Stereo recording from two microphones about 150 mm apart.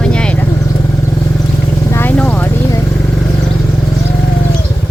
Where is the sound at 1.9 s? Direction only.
15° left (ahead or behind).